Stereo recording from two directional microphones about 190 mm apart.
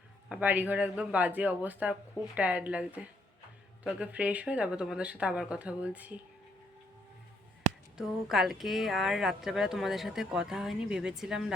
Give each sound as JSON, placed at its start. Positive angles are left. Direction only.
{"t": 0.3, "sound": "speech", "side_deg": -10}
{"t": 7.9, "sound": "speech", "side_deg": 0}